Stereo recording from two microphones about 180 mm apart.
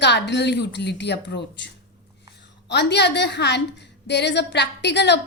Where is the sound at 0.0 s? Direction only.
70° left (ahead or behind).